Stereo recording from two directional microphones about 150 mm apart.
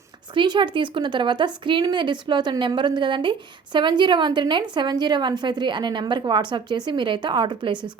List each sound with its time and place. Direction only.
0.3 s a woman's voice: 30° right (ahead or behind)